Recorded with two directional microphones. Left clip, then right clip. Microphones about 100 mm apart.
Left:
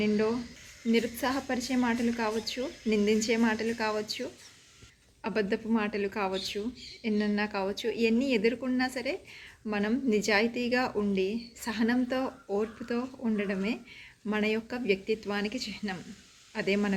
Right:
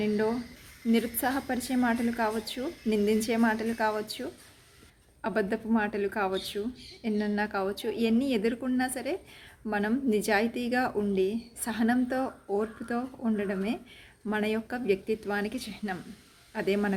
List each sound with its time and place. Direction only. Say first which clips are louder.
0.0 s a woman's voice: even; 30° right (ahead or behind)
5.2 s a woman's voice: right 1 dB; 30° right (ahead or behind)